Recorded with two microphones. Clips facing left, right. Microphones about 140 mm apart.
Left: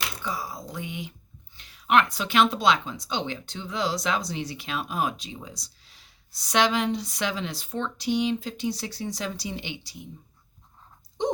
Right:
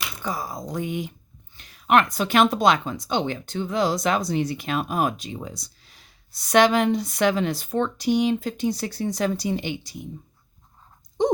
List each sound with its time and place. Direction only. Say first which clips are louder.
0.2 s speech: right 3 dB; 45° right (ahead or behind)
11.2 s speech: right 6 dB; 45° right (ahead or behind)